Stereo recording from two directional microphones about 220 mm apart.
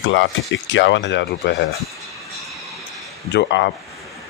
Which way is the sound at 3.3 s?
50° left (ahead or behind).